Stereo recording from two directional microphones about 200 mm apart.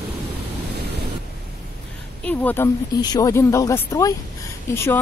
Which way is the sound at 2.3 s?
10° left (ahead or behind).